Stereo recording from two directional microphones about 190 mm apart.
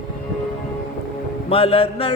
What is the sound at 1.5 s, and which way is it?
Mantra, 30° left (ahead or behind).